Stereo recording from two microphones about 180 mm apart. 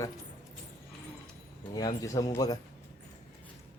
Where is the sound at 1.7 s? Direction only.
20° left (ahead or behind).